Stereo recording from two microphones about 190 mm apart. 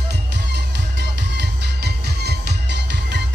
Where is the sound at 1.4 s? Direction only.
60° right (ahead or behind).